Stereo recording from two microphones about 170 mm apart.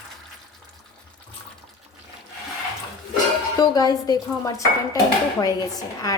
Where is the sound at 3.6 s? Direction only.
20° left (ahead or behind).